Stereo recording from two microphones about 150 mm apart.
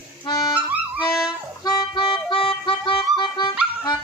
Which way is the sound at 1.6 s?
30° left (ahead or behind).